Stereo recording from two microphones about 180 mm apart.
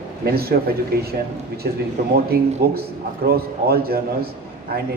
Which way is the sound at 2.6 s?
60° right (ahead or behind).